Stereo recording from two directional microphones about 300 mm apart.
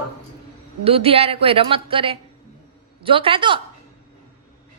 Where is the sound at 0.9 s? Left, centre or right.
Centre.